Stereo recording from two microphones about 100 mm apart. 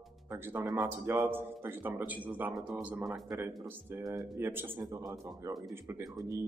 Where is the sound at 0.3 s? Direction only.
20° right (ahead or behind).